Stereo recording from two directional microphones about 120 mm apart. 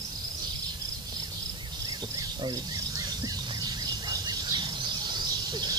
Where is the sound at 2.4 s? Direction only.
30° right (ahead or behind).